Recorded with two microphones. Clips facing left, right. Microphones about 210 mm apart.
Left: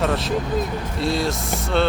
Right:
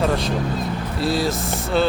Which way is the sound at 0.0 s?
Centre (ahead or behind).